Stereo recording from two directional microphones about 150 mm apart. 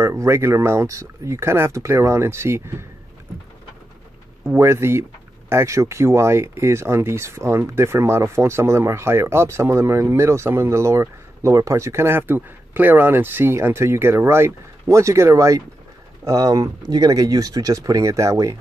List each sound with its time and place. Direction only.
0.0 s speech: 20° right (ahead or behind)
4.5 s speech: 15° right (ahead or behind)